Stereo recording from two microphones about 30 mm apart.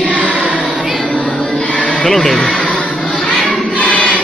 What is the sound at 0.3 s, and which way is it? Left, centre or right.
Choir, right.